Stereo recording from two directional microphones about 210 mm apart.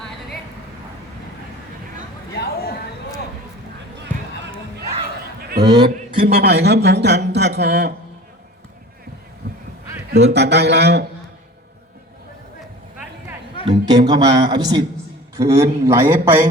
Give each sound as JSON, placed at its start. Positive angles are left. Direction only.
{"t": 2.3, "sound": "chatter", "side_deg": 50}
{"t": 5.4, "sound": "a sound", "side_deg": -45}
{"t": 5.6, "sound": "speech", "side_deg": -20}
{"t": 6.1, "sound": "speech", "side_deg": -45}
{"t": 9.4, "sound": "a sound", "side_deg": -50}
{"t": 10.1, "sound": "speech", "side_deg": -55}
{"t": 13.7, "sound": "a man's voice", "side_deg": -20}